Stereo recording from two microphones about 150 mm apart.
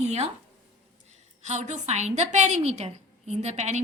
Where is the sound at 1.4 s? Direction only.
50° right (ahead or behind).